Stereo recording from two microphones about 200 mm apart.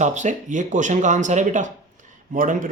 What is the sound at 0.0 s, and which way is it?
A man's voice, 35° right (ahead or behind).